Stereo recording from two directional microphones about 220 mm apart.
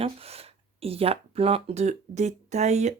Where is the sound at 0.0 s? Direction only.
25° right (ahead or behind).